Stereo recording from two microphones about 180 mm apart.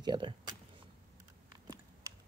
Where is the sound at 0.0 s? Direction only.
25° right (ahead or behind).